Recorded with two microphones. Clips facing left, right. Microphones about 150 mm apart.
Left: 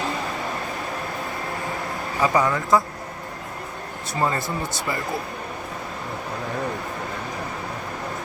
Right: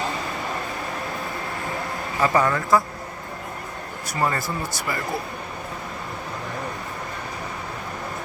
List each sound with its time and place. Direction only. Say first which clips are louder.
2.2 s speech: even; 15° left (ahead or behind)
4.1 s speech: left 1 dB; 20° left (ahead or behind)